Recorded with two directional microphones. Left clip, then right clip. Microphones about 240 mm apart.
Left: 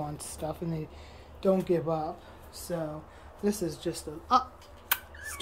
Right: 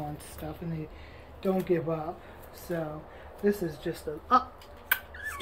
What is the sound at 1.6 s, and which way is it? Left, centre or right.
Speech, centre.